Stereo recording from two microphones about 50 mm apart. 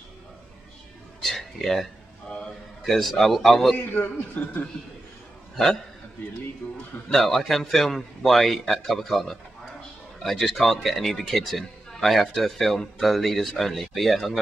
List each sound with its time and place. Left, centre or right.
1.2 s a sound: centre
2.8 s speech: centre
3.7 s a man's voice: left
4.4 s a man's voice: left
6.6 s a man's voice: left
7.1 s speech: centre